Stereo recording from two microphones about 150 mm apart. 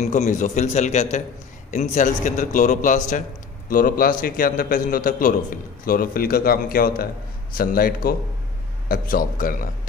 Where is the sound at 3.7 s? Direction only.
70° left (ahead or behind).